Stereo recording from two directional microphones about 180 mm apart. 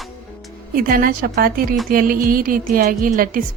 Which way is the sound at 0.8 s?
50° right (ahead or behind).